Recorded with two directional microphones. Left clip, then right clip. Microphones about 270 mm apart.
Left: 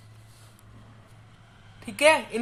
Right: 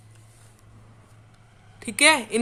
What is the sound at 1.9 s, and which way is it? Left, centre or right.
Speech, right.